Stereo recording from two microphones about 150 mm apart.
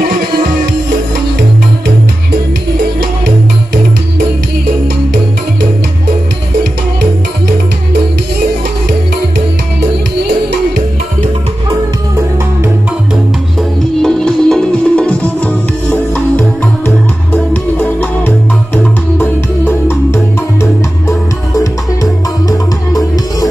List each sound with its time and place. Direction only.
14.0 s music: 5° left (ahead or behind)
22.5 s music: 25° left (ahead or behind)